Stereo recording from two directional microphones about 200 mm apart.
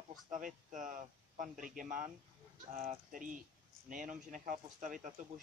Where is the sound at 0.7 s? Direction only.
40° right (ahead or behind).